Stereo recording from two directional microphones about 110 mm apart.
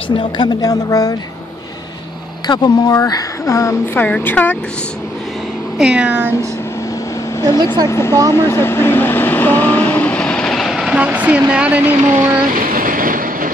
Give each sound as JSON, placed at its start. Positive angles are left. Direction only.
{"t": 0.1, "sound": "speech", "side_deg": 45}
{"t": 0.6, "sound": "speech", "side_deg": 35}
{"t": 2.4, "sound": "a woman's voice", "side_deg": 40}
{"t": 4.0, "sound": "a woman's voice", "side_deg": 15}
{"t": 5.8, "sound": "speech", "side_deg": -10}
{"t": 7.4, "sound": "a woman's voice", "side_deg": 25}
{"t": 8.3, "sound": "vehicle", "side_deg": 25}